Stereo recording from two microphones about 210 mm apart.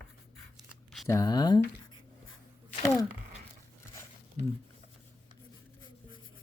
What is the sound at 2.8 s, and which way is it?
Speech, 15° left (ahead or behind).